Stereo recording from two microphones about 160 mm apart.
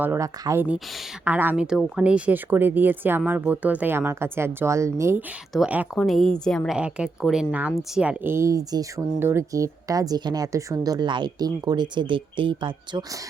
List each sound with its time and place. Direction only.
0.0 s speech: 15° right (ahead or behind)
6.0 s a woman's voice: centre (ahead or behind); by 13.1 s 30° right (ahead or behind)